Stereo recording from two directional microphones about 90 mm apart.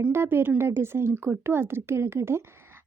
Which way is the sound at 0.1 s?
25° right (ahead or behind).